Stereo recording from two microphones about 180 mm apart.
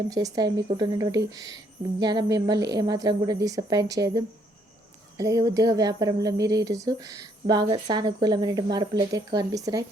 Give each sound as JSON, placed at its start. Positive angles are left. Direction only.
{"t": 0.1, "sound": "speech", "side_deg": -20}